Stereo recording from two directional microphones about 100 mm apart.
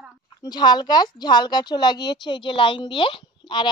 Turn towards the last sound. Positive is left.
turn(degrees=55)  # may be behind; listen again after turning